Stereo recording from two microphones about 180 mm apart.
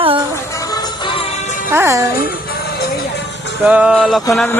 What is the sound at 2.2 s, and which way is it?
Music, 55° left (ahead or behind).